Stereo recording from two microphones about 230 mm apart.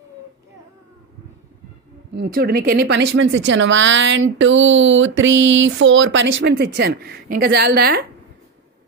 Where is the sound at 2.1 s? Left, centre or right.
Right.